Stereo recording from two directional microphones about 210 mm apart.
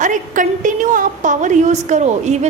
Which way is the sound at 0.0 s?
40° right (ahead or behind).